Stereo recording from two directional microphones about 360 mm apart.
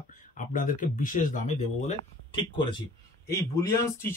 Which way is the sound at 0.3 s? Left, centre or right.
Left.